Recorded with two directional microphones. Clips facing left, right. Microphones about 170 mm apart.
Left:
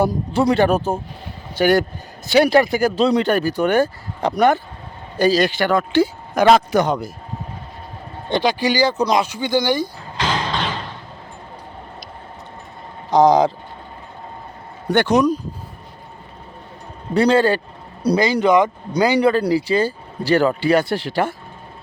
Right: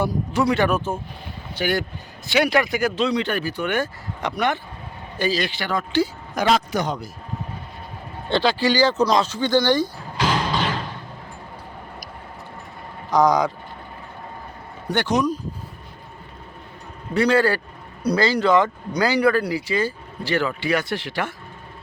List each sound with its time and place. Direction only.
0.0 s speech: 35° left (ahead or behind); by 7.1 s 55° left (ahead or behind)
8.3 s speech: 15° left (ahead or behind)
10.2 s a sound: 5° right (ahead or behind)
13.1 s speech: 25° left (ahead or behind)
14.9 s speech: 60° left (ahead or behind)
17.2 s a man's voice: 30° left (ahead or behind)
19.4 s speech: 35° left (ahead or behind)